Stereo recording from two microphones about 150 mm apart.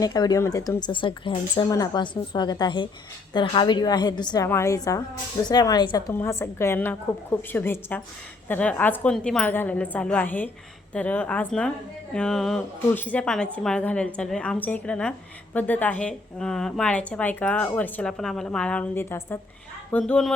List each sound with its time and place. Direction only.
0.0 s a woman's voice: 25° left (ahead or behind)
4.4 s speech: 20° left (ahead or behind)
6.1 s a woman's voice: 15° left (ahead or behind)